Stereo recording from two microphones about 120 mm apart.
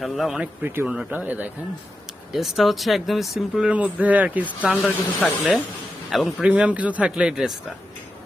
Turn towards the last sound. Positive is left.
turn(degrees=-5)  # may be behind; listen again after turning